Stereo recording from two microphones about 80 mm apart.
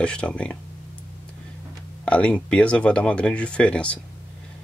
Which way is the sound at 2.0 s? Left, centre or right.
Centre.